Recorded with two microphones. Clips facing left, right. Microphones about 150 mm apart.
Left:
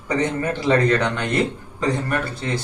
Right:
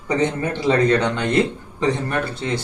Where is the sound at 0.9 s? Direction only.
20° right (ahead or behind).